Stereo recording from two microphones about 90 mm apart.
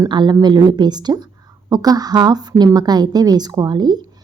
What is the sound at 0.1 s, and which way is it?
A woman's voice, 55° right (ahead or behind).